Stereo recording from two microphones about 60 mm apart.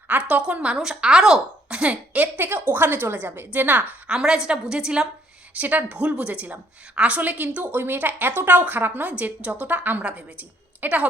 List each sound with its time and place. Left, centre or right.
0.1 s a woman's voice: right
4.1 s a woman's voice: centre
5.5 s a woman's voice: right